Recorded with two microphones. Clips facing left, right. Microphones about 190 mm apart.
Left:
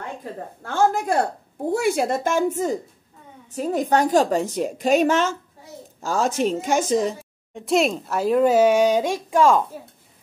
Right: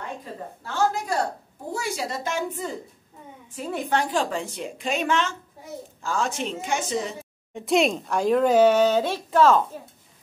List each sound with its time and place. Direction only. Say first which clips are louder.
0.6 s a woman's voice: left 4 dB; 50° left (ahead or behind)
7.1 s a woman's voice: left 7 dB; centre (ahead or behind)